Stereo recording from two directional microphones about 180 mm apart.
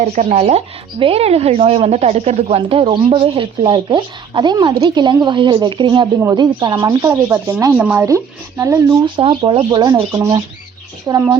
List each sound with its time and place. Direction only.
0.0 s speech: 40° right (ahead or behind)
9.9 s speech: 15° right (ahead or behind)